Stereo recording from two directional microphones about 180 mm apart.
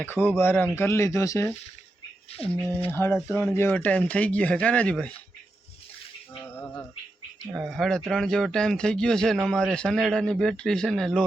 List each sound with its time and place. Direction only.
0.0 s speech: 10° left (ahead or behind)
2.3 s speech: 35° left (ahead or behind)
2.9 s speech: 15° left (ahead or behind)
6.4 s a sound: 10° left (ahead or behind)
7.5 s speech: centre (ahead or behind)